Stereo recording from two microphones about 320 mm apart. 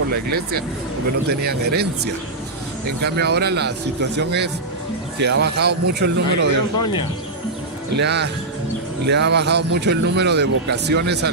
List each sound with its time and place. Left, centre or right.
0.1 s speech: right
3.0 s speech: right
6.7 s speech: centre
7.9 s speech: right